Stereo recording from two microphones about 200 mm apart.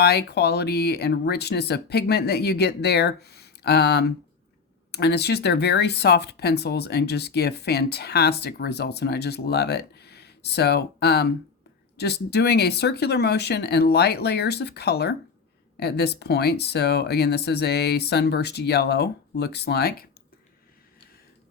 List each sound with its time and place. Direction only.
0.0 s speech: 55° left (ahead or behind)